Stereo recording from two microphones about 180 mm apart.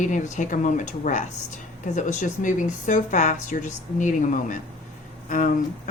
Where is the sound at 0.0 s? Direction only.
45° left (ahead or behind).